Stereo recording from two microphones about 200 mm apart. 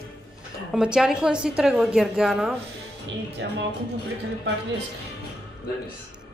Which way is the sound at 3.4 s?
65° right (ahead or behind).